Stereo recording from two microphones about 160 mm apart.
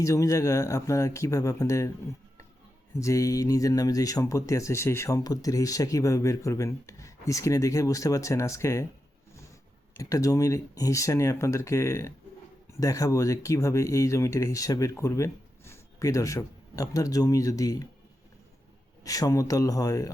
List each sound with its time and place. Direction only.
0.0 s speech: 20° left (ahead or behind)
3.0 s speech: 20° left (ahead or behind)
10.0 s speech: 20° left (ahead or behind)
19.0 s speech: 20° left (ahead or behind)